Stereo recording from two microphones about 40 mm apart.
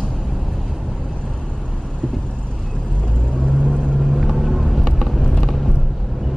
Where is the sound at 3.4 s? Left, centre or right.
Left.